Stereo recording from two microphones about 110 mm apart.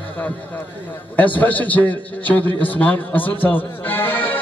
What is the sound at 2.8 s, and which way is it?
Speech, 15° left (ahead or behind).